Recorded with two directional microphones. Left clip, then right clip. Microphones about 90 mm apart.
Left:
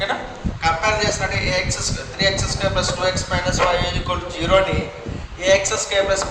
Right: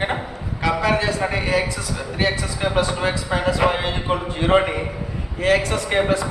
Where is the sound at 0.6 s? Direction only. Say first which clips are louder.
Left 1 dB; 60° left (ahead or behind).